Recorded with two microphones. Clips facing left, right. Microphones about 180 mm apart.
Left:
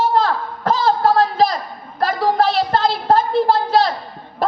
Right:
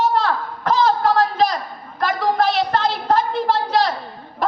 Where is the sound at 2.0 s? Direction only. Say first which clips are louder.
Left 2 dB; 35° left (ahead or behind).